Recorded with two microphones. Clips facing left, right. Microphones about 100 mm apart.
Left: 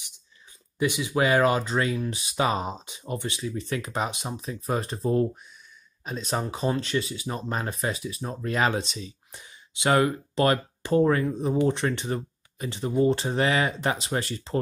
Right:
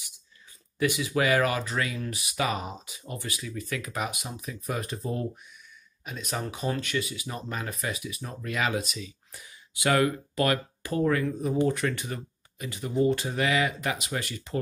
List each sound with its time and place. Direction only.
0.7 s speech: 20° left (ahead or behind)